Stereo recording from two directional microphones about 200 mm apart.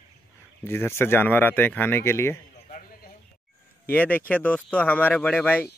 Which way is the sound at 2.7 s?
45° left (ahead or behind).